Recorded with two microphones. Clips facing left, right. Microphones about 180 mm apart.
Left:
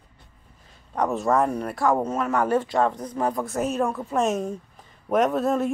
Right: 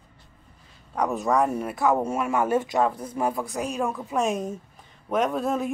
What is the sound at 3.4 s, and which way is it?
Speech, centre (ahead or behind).